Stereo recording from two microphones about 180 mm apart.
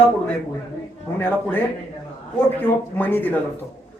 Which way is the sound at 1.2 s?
10° left (ahead or behind).